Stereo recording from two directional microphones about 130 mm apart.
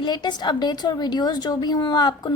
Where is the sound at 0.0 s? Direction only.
35° left (ahead or behind).